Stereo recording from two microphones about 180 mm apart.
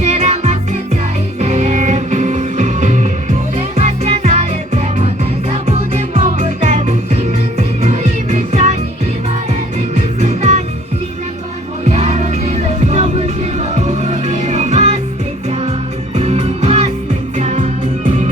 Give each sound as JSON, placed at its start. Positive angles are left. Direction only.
{"t": 0.0, "sound": "music", "side_deg": -40}
{"t": 11.9, "sound": "music", "side_deg": -35}
{"t": 16.1, "sound": "music", "side_deg": -35}